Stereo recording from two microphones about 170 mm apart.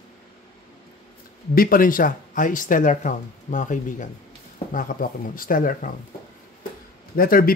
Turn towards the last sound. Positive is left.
turn(degrees=60)  # may be behind; listen again after turning